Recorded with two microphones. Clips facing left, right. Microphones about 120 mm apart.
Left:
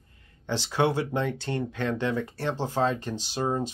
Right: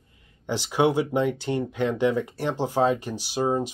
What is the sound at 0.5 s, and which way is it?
Speech, 15° right (ahead or behind).